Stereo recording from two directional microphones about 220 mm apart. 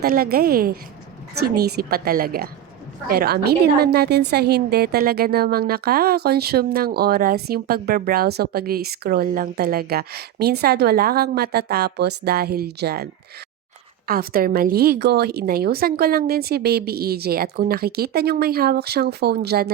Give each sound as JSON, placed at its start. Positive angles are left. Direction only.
{"t": 0.0, "sound": "a woman's voice", "side_deg": -45}
{"t": 14.1, "sound": "a woman's voice", "side_deg": -40}